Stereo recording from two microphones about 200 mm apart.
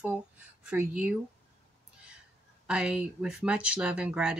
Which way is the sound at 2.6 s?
5° right (ahead or behind).